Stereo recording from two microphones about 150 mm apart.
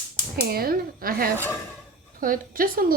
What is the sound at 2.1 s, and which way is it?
Speech, 65° right (ahead or behind).